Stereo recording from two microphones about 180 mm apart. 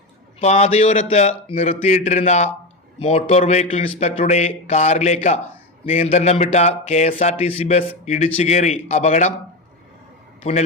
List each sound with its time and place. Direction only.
0.3 s a man's voice: 35° left (ahead or behind)